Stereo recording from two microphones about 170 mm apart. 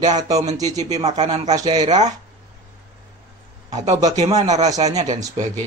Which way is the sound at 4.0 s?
20° right (ahead or behind).